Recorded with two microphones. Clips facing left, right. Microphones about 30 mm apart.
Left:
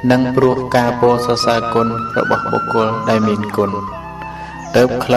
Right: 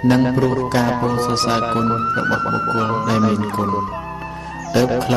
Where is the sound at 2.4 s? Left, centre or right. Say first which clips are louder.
Left 2 dB; centre.